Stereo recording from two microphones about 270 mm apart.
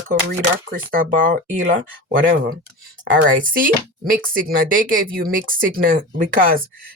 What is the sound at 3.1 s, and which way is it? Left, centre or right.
Speech, right.